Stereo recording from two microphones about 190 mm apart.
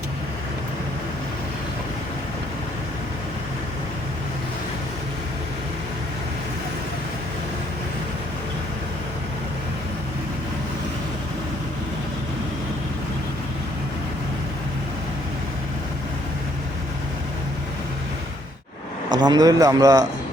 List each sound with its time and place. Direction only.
19.1 s speech: 20° right (ahead or behind)